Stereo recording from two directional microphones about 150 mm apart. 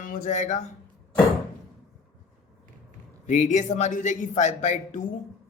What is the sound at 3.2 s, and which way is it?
A man's voice, 55° left (ahead or behind).